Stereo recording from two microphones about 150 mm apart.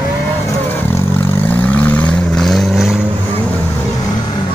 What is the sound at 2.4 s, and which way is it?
Vehicle, centre (ahead or behind).